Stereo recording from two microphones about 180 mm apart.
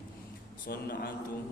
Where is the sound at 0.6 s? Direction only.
55° left (ahead or behind).